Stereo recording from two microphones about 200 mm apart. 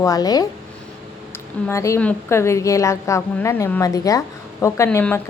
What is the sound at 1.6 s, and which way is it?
A woman's voice, 15° left (ahead or behind).